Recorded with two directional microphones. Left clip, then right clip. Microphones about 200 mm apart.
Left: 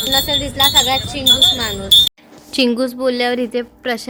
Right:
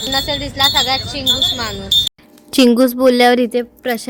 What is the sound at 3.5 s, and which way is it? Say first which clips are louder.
Speech: right 2 dB; 20° right (ahead or behind).